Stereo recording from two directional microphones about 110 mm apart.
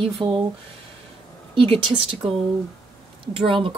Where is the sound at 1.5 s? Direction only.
55° right (ahead or behind).